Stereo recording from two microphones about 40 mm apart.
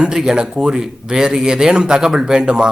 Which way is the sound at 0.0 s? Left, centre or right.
Centre.